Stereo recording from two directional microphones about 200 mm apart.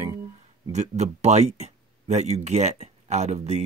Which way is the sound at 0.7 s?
35° right (ahead or behind).